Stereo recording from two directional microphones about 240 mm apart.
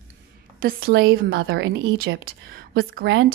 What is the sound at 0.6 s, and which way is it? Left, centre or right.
Speech, right.